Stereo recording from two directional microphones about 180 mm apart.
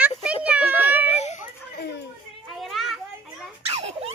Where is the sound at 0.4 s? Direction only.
10° right (ahead or behind).